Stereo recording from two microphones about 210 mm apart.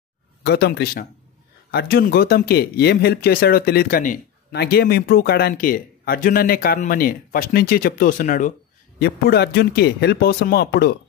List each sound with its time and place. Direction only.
0.4 s speech: 50° left (ahead or behind)
9.0 s speech: 50° left (ahead or behind)